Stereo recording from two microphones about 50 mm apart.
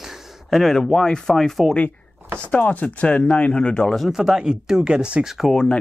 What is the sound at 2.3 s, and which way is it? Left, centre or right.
Speech, left.